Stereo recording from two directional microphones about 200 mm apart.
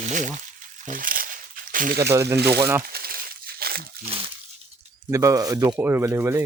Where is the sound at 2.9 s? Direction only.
50° right (ahead or behind).